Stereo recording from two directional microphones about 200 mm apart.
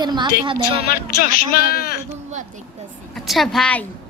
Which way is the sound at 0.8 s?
50° left (ahead or behind).